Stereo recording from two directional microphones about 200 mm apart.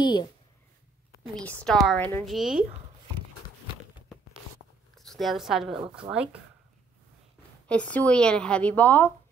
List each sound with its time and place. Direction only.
0.0 s speech: 20° left (ahead or behind)
1.3 s speech: 5° left (ahead or behind)
2.2 s speech: centre (ahead or behind)
4.9 s speech: centre (ahead or behind)
7.6 s speech: 5° left (ahead or behind)